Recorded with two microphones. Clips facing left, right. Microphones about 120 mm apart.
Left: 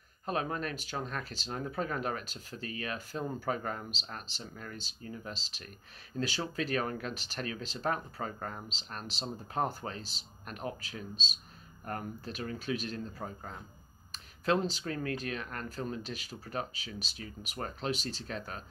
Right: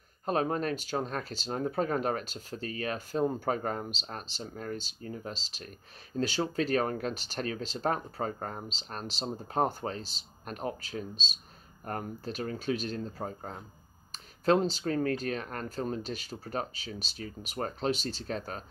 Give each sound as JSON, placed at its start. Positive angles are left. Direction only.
{"t": 0.2, "sound": "speech", "side_deg": -35}